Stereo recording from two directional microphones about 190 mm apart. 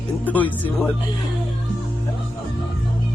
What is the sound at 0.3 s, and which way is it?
Speech, 10° left (ahead or behind).